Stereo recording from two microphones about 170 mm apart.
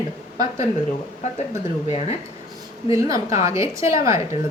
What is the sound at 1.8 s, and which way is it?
Speech, 40° left (ahead or behind).